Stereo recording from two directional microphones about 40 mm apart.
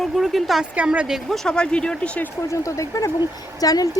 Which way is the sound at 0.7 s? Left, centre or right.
Right.